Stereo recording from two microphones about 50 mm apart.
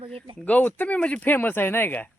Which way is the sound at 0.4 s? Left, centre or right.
Left.